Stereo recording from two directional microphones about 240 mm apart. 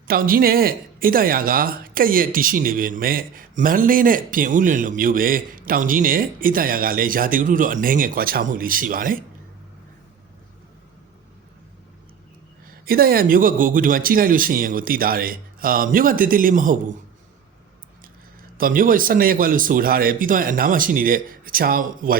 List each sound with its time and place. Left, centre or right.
0.1 s speech: right
12.8 s speech: right
18.5 s speech: right